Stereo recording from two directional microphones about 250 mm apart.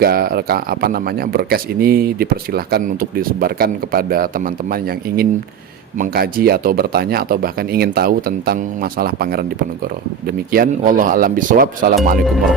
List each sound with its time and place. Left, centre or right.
0.0 s speech: right